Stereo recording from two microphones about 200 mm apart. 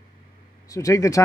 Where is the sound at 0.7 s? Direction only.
15° left (ahead or behind).